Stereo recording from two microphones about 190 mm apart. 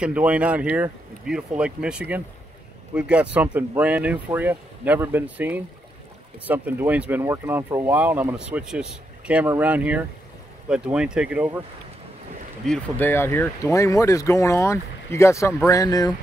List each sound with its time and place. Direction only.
0.0 s speech: 5° right (ahead or behind)
12.6 s speech: 5° left (ahead or behind)